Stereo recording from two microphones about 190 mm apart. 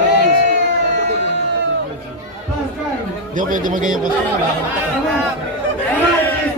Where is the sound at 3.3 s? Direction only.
45° right (ahead or behind).